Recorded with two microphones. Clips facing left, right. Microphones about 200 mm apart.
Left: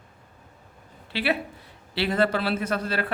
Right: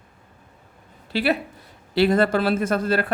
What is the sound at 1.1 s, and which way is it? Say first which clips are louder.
Speech: right 4 dB; 40° right (ahead or behind).